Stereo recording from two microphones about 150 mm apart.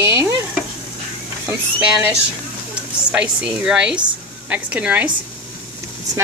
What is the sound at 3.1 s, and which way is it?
Speech, 10° right (ahead or behind).